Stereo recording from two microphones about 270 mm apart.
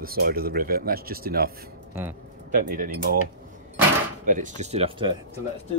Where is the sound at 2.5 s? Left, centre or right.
Right.